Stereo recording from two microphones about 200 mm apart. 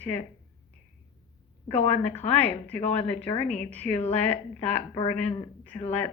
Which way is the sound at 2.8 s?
30° left (ahead or behind).